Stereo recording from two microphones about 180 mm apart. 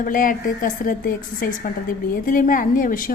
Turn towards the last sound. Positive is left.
turn(degrees=50)  # may be behind; listen again after turning